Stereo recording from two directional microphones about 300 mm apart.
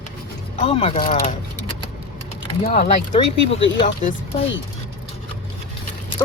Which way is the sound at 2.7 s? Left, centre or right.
Left.